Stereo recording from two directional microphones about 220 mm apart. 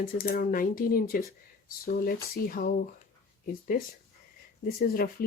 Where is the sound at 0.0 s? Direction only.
40° left (ahead or behind).